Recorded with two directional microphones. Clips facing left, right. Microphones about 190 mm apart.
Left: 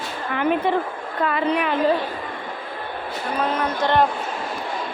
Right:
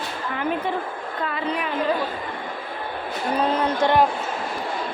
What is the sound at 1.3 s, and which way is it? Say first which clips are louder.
Speech: left 6 dB; 70° left (ahead or behind).